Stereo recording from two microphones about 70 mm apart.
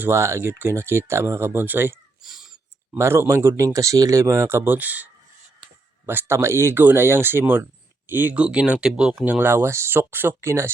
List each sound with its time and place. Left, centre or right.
0.0 s speech: right
1.6 s speech: right
2.2 s a sound: centre
3.0 s speech: right
3.6 s speech: right
6.1 s speech: right; by 9.2 s centre
9.4 s speech: right